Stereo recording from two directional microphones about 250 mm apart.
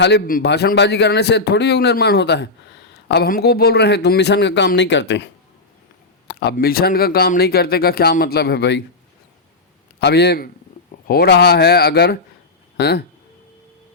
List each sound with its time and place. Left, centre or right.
0.0 s speech: left
10.0 s speech: left